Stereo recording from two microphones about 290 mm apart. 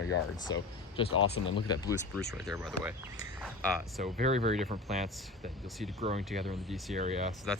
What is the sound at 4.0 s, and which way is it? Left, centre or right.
Speech, right.